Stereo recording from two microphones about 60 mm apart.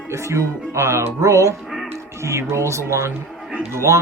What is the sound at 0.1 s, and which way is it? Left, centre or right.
Speech, right.